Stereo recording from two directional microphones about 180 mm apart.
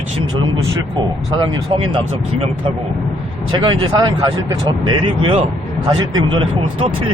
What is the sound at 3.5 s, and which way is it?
Speech, 30° right (ahead or behind).